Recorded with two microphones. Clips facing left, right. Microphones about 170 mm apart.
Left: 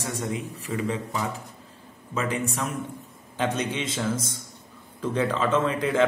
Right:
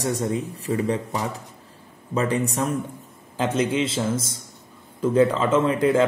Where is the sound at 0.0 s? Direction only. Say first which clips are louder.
Right 6 dB; 35° right (ahead or behind).